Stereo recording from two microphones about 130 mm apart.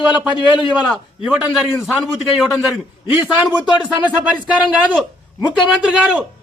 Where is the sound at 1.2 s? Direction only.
10° right (ahead or behind).